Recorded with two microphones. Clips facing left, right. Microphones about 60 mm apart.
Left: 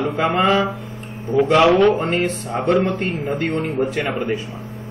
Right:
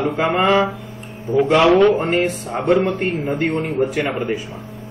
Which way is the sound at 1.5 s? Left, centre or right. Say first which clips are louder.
Right 1 dB; centre.